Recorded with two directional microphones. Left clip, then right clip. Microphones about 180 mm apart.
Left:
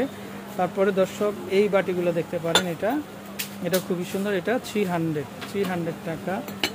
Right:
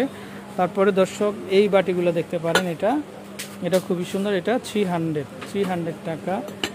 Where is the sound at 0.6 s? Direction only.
30° right (ahead or behind).